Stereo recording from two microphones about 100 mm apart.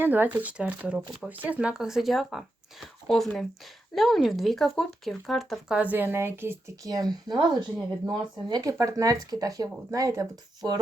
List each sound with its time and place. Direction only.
0.0 s speech: 20° right (ahead or behind)
6.8 s speech: 40° right (ahead or behind)